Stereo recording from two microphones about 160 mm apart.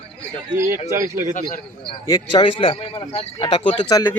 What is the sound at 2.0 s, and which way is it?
Speech, 20° left (ahead or behind).